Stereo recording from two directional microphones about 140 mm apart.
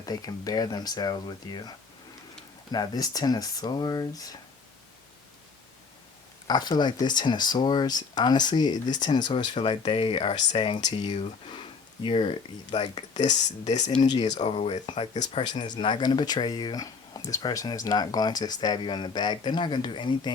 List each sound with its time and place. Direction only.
0.0 s speech: 25° left (ahead or behind)
2.7 s speech: 30° left (ahead or behind)
6.5 s speech: 30° left (ahead or behind)
11.0 s speech: 55° left (ahead or behind)
12.0 s speech: 35° left (ahead or behind)
14.3 s speech: 40° left (ahead or behind)